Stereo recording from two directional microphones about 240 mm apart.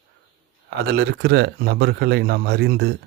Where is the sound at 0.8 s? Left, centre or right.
Right.